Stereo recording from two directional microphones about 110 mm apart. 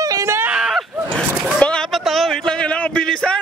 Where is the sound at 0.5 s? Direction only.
5° right (ahead or behind).